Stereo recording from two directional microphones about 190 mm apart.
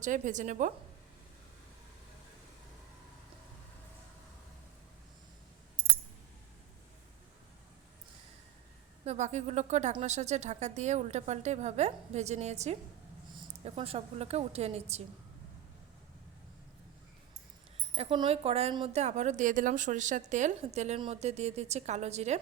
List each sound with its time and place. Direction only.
0.0 s a woman's voice: 40° right (ahead or behind)
9.0 s a woman's voice: 40° right (ahead or behind)
17.9 s a woman's voice: 30° right (ahead or behind)